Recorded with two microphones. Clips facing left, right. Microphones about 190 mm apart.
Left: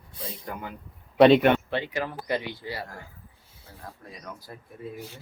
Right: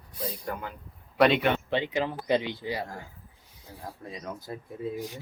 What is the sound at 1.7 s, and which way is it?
Speech, 20° right (ahead or behind).